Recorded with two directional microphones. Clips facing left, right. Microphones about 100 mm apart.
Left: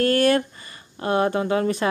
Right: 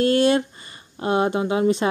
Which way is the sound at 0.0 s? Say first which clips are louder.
Right 1 dB; 20° right (ahead or behind).